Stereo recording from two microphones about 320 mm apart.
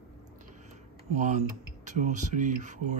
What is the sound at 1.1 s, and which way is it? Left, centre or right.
Speech, right.